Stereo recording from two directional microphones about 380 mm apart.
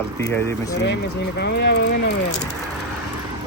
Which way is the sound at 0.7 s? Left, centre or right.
Left.